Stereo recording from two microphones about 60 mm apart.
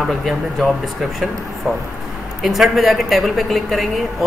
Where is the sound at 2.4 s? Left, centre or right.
Centre.